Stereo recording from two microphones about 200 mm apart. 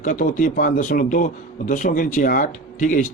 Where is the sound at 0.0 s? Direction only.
40° left (ahead or behind).